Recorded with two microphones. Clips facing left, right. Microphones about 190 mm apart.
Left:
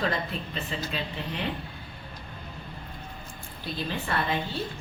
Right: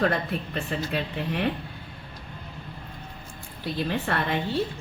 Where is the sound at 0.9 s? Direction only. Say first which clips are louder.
Right 5 dB; 65° right (ahead or behind).